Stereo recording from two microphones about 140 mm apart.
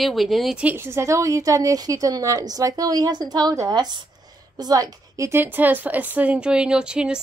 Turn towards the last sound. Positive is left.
turn(degrees=-5)  # may be behind; listen again after turning